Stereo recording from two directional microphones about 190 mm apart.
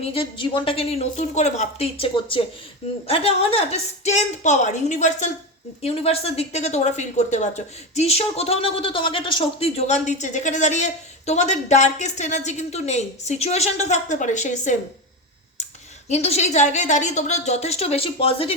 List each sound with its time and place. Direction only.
0.0 s speech: 30° left (ahead or behind)
16.0 s speech: 35° left (ahead or behind)